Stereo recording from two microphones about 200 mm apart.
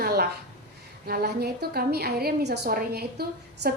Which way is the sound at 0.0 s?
50° right (ahead or behind).